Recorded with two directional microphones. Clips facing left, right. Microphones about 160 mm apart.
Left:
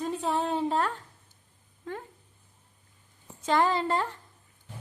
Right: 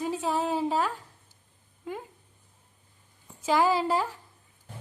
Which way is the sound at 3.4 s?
5° right (ahead or behind).